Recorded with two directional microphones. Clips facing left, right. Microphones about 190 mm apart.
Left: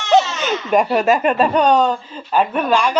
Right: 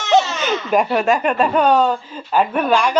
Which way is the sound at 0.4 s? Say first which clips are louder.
Left 1 dB; centre (ahead or behind).